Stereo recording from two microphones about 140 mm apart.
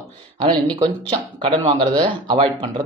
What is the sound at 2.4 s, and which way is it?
Speech, 45° right (ahead or behind).